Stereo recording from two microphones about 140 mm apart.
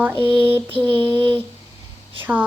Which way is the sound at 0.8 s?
15° left (ahead or behind).